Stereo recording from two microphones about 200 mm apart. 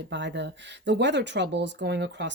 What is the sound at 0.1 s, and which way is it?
Speech, 60° right (ahead or behind).